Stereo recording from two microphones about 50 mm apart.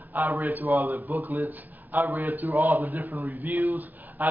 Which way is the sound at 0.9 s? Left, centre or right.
Right.